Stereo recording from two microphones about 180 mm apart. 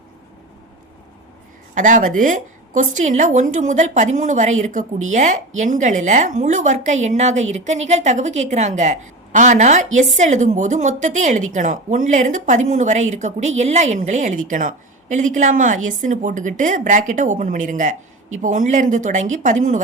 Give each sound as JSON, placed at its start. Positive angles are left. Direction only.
{"t": 1.7, "sound": "a woman's voice", "side_deg": -45}